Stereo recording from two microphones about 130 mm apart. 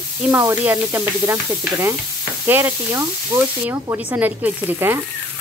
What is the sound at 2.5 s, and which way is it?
Speech, 20° right (ahead or behind).